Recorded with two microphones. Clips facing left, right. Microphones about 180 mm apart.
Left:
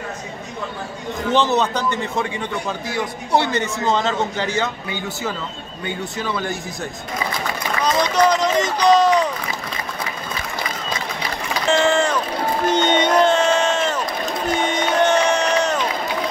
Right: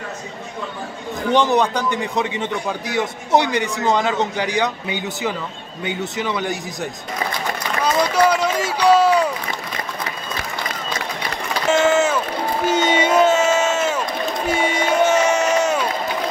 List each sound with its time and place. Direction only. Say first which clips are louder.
1.3 s a man's voice: right 2 dB; 15° right (ahead or behind)
7.8 s run: even; 10° right (ahead or behind)
11.6 s vehicle: right 1 dB; 5° right (ahead or behind)
12.6 s run: even; 5° right (ahead or behind)